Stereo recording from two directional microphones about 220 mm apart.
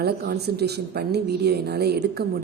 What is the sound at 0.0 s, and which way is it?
A woman's voice, 45° right (ahead or behind).